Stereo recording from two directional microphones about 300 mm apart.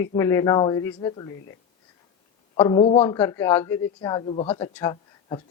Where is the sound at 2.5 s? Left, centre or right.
Centre.